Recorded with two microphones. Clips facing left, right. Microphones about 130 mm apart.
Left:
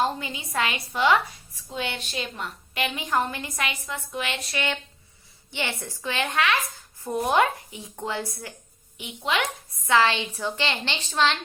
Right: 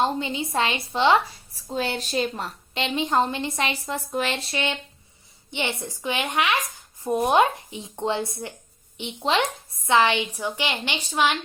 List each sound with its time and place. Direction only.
0.0 s a woman's voice: 25° right (ahead or behind)